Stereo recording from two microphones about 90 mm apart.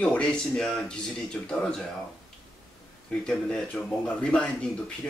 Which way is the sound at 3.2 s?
10° left (ahead or behind).